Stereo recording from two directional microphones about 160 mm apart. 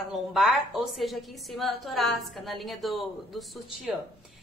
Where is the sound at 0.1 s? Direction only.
Centre (ahead or behind).